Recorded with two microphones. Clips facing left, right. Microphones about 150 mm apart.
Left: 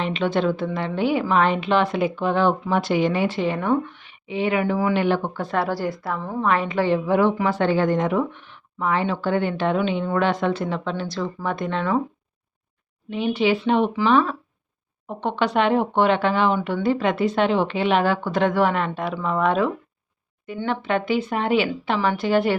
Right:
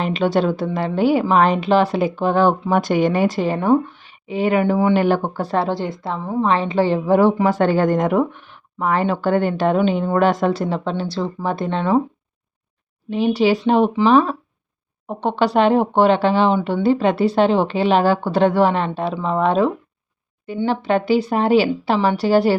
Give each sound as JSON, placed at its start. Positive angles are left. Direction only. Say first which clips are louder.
{"t": 0.0, "sound": "a woman's voice", "louder": "right 4 dB", "side_deg": -40}
{"t": 4.9, "sound": "a woman's voice", "louder": "right 4 dB", "side_deg": -40}
{"t": 13.1, "sound": "a woman's voice", "louder": "right 4 dB", "side_deg": -35}